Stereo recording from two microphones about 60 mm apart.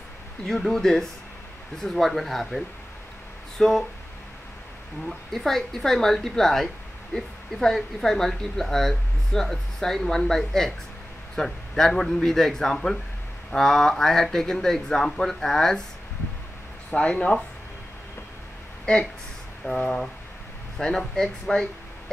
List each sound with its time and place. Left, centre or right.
0.5 s speech: centre
5.0 s speech: centre
16.9 s speech: centre
18.9 s speech: centre